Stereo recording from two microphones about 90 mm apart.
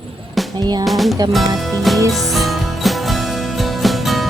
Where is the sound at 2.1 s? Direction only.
Centre (ahead or behind).